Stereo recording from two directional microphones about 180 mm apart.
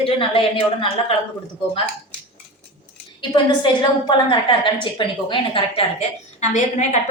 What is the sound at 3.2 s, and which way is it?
A woman's voice, 25° left (ahead or behind).